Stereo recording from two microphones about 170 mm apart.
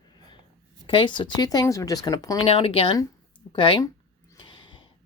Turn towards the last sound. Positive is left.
turn(degrees=25)  # may be behind; listen again after turning